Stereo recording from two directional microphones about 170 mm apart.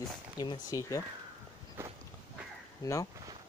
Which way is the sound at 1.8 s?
15° right (ahead or behind).